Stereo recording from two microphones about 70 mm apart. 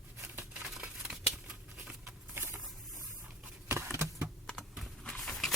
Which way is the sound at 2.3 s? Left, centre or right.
Right.